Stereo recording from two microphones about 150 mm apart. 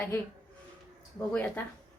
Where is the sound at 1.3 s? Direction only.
10° left (ahead or behind).